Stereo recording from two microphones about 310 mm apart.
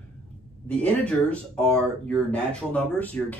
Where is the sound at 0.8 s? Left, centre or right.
Centre.